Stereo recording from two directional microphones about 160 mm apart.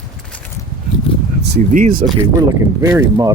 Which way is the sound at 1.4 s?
80° right.